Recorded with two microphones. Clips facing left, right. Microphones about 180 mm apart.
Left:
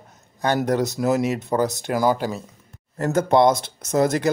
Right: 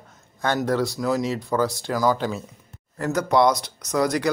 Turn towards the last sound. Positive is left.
turn(degrees=25)  # may be behind; listen again after turning